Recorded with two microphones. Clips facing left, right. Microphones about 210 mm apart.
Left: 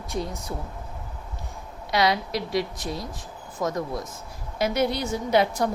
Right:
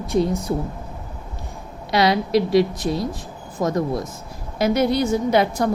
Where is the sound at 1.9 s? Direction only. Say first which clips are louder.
Right 6 dB; 75° right (ahead or behind).